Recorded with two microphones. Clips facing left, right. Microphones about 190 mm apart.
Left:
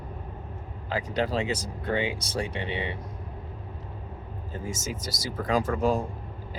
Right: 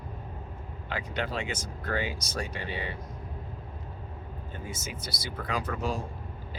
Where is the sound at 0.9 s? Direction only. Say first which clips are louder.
Left 6 dB; 40° left (ahead or behind).